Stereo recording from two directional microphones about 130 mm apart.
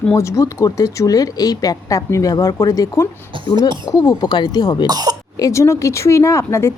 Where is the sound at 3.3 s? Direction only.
40° right (ahead or behind).